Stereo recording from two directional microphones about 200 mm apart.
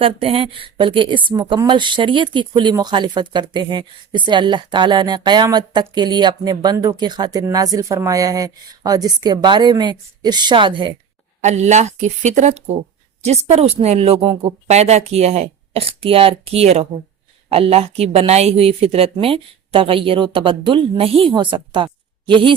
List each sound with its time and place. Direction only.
0.0 s speech: 30° right (ahead or behind)
11.3 s a woman's voice: 35° right (ahead or behind)